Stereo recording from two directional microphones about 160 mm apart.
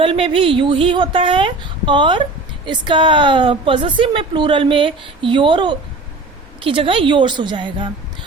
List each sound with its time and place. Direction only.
0.0 s a woman's voice: 35° right (ahead or behind)